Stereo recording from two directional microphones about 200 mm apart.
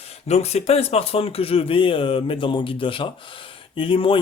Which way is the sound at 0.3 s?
35° left (ahead or behind).